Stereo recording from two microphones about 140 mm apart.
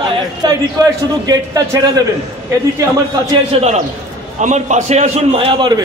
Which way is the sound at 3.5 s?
40° right (ahead or behind).